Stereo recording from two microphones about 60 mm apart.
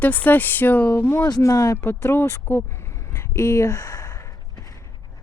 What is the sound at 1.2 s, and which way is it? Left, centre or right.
Speech, left.